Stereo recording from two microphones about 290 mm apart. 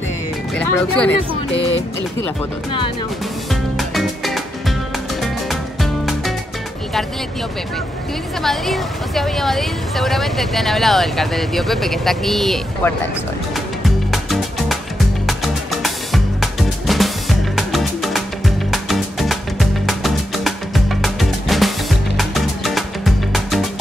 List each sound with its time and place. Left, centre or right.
0.6 s speech: centre
1.5 s music: left
3.7 s music: centre
8.4 s speech: centre
13.8 s music: centre